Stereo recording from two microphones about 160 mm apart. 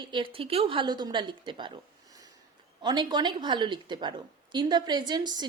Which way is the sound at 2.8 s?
25° right (ahead or behind).